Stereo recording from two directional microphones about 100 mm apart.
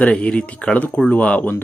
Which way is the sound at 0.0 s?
10° left (ahead or behind).